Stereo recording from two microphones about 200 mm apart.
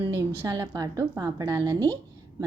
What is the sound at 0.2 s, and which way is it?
A woman's voice, 15° right (ahead or behind).